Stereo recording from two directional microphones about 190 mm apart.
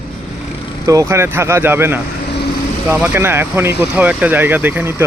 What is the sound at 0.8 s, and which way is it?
Speech, 15° right (ahead or behind).